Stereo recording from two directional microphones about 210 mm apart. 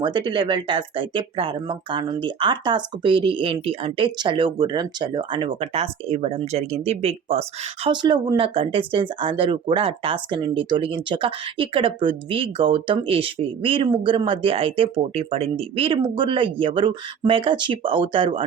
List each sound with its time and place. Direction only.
0.0 s speech: 20° right (ahead or behind)